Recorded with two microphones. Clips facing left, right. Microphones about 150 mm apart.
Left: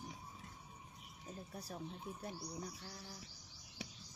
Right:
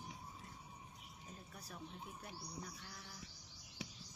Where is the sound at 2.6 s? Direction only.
30° left (ahead or behind).